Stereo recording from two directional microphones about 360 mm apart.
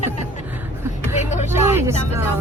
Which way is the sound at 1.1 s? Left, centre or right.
Centre.